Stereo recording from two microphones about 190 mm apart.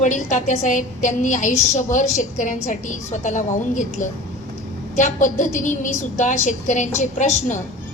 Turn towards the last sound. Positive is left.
turn(degrees=40)  # may be behind; listen again after turning